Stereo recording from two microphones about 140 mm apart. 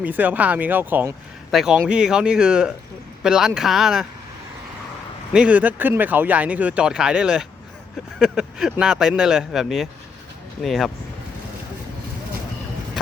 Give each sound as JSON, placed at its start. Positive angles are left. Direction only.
{"t": 0.0, "sound": "speech", "side_deg": -10}
{"t": 1.5, "sound": "speech", "side_deg": -5}
{"t": 5.3, "sound": "speech", "side_deg": -10}